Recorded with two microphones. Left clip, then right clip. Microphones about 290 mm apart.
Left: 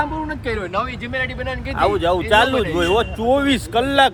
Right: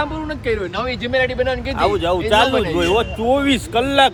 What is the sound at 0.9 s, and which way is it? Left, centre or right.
Speech, right.